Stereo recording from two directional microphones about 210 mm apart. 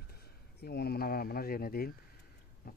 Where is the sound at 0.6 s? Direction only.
50° left (ahead or behind).